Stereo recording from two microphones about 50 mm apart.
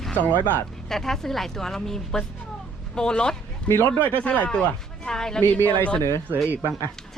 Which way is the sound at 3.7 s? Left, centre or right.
Left.